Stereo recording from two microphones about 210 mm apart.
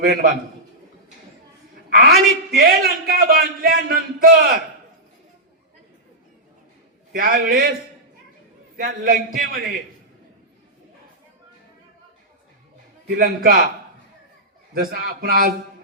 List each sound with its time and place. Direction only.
0.0 s a man's voice: 45° right (ahead or behind)
1.9 s a man's voice: 50° right (ahead or behind)
7.1 s a man's voice: 45° right (ahead or behind)
13.1 s a man's voice: 45° right (ahead or behind)
14.7 s a man's voice: 45° right (ahead or behind)